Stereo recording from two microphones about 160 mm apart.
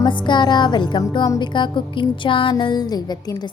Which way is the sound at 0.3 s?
30° left (ahead or behind).